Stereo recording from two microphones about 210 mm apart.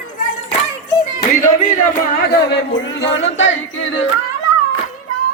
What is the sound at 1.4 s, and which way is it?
Speech, 35° left (ahead or behind).